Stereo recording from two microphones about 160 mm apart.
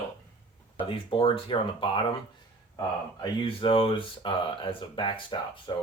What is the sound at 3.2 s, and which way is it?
Speech, 35° left (ahead or behind).